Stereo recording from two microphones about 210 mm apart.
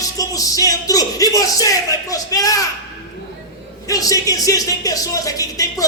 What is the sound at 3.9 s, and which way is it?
Speech, 15° left (ahead or behind).